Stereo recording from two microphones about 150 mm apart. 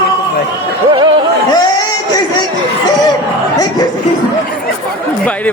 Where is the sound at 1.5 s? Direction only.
25° left (ahead or behind).